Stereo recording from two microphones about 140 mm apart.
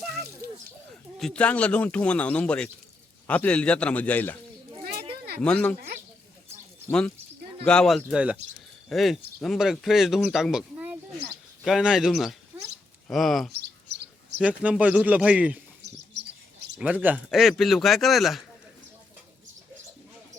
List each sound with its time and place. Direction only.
0.4 s a sound: 90° right
1.2 s speech: 5° left (ahead or behind)
5.4 s speech: 10° left (ahead or behind)
7.6 s speech: 5° left (ahead or behind)
12.5 s a sound: 10° right (ahead or behind)
13.1 s speech: centre (ahead or behind)
14.3 s a man's voice: 10° right (ahead or behind)
16.8 s a man's voice: 10° right (ahead or behind)
17.2 s speech: centre (ahead or behind)